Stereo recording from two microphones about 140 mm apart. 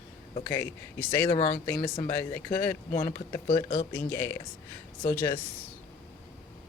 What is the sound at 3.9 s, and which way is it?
Speech, 15° left (ahead or behind).